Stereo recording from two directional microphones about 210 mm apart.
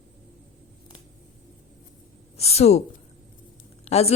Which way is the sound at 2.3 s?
30° left (ahead or behind).